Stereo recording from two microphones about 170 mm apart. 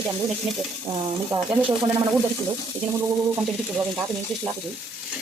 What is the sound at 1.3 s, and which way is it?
Speech, 20° right (ahead or behind).